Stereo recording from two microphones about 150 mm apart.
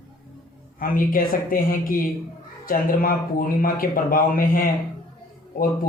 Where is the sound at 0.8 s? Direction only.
65° left (ahead or behind).